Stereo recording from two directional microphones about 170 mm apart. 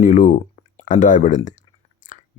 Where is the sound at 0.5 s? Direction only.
45° left (ahead or behind).